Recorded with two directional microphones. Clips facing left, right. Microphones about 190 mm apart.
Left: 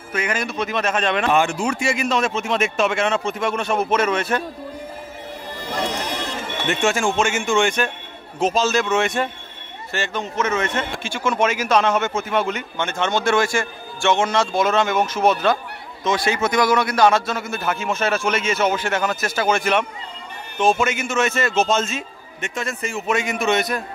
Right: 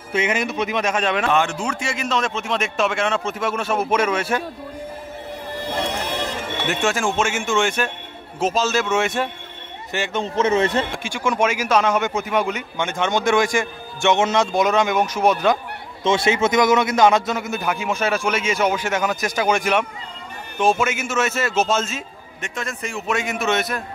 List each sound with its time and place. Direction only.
0.1 s speech: 20° right (ahead or behind)
1.2 s speech: 10° left (ahead or behind); by 4.5 s 10° right (ahead or behind)
6.7 s speech: centre (ahead or behind)
10.2 s a man's voice: 30° right (ahead or behind)
11.0 s speech: 15° right (ahead or behind)
16.0 s speech: 25° right (ahead or behind); by 23.8 s centre (ahead or behind)